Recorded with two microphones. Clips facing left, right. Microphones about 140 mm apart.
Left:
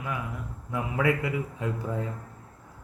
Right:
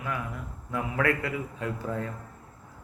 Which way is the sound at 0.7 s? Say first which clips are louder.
Left 1 dB; 15° left (ahead or behind).